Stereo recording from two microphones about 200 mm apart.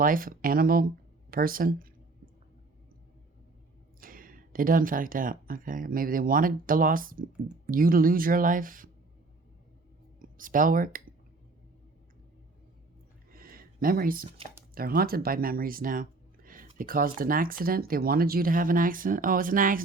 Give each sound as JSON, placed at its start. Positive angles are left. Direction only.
{"t": 0.0, "sound": "speech", "side_deg": -45}
{"t": 1.3, "sound": "a sound", "side_deg": -45}
{"t": 4.0, "sound": "speech", "side_deg": -45}
{"t": 10.2, "sound": "speech", "side_deg": -45}
{"t": 13.3, "sound": "a sound", "side_deg": -45}
{"t": 14.8, "sound": "speech", "side_deg": -50}